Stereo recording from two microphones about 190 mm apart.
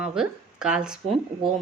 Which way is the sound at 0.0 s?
5° right (ahead or behind).